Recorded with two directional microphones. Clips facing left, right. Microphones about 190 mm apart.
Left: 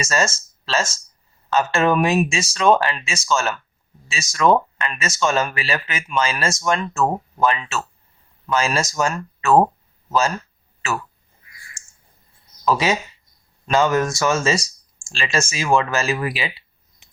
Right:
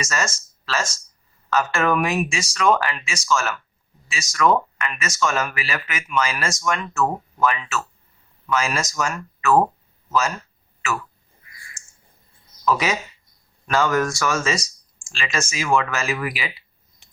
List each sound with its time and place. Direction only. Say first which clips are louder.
0.0 s speech: left 5 dB; 30° left (ahead or behind)
12.6 s speech: left 2 dB; 30° left (ahead or behind)